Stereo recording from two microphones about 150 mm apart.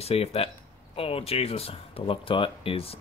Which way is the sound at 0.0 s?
45° left (ahead or behind).